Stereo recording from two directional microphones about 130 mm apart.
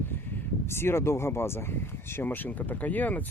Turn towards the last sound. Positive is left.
turn(degrees=15)  # may be behind; listen again after turning